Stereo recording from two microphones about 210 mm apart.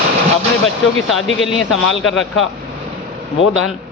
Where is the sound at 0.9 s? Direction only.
65° left (ahead or behind).